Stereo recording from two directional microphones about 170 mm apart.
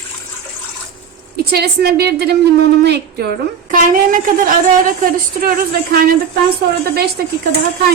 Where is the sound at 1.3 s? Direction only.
70° right (ahead or behind).